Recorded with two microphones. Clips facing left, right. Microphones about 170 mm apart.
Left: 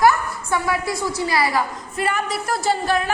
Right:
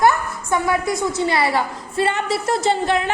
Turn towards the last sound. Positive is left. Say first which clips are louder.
# right 2 dB
turn(degrees=-25)  # may be behind; listen again after turning